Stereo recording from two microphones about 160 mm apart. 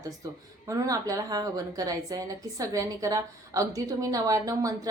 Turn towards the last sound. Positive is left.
turn(degrees=-20)  # may be behind; listen again after turning